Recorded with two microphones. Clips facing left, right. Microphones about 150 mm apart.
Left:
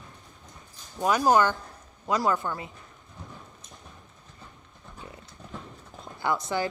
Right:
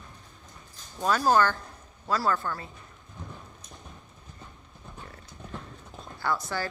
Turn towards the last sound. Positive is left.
turn(degrees=20)  # may be behind; listen again after turning